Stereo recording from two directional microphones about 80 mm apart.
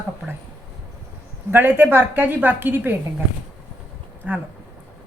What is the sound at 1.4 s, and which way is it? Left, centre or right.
A woman's voice, right.